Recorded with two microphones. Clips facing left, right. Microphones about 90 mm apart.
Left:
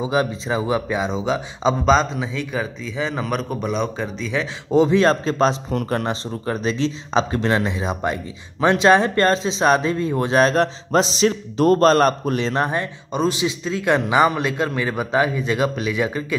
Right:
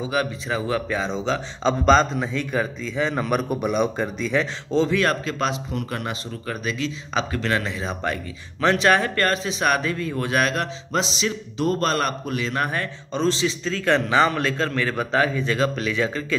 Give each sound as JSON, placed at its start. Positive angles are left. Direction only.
{"t": 0.0, "sound": "a man's voice", "side_deg": 25}
{"t": 4.6, "sound": "speech", "side_deg": 20}
{"t": 12.6, "sound": "a man's voice", "side_deg": 20}